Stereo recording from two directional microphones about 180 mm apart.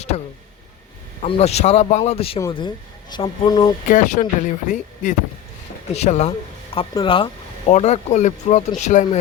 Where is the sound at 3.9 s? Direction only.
45° left (ahead or behind).